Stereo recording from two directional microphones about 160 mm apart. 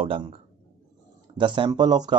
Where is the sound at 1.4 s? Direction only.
30° right (ahead or behind).